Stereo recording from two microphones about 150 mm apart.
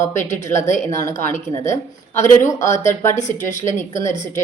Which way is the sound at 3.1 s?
55° left (ahead or behind).